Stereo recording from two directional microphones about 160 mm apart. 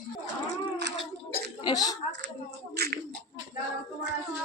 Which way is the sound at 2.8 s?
90° right.